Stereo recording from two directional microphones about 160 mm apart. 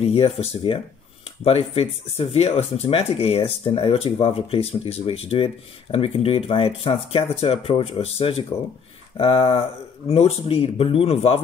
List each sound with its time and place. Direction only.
0.0 s speech: 40° left (ahead or behind)